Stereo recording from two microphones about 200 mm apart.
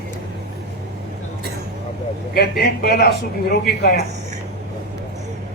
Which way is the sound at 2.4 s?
50° left (ahead or behind).